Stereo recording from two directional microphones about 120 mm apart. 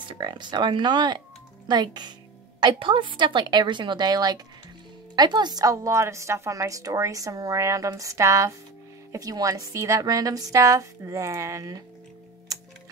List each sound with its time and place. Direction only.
0.1 s a woman's voice: 40° right (ahead or behind)